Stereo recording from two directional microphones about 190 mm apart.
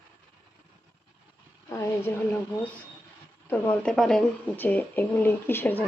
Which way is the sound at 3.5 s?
5° left (ahead or behind).